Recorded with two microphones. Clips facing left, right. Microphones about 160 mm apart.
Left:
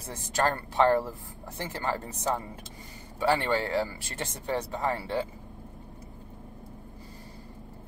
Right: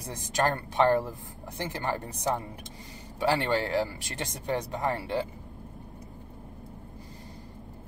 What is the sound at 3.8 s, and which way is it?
Speech, 15° right (ahead or behind).